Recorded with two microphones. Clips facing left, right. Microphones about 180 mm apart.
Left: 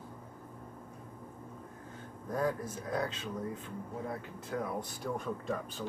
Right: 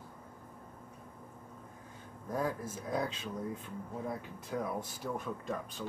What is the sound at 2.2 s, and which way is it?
Speech, 10° right (ahead or behind).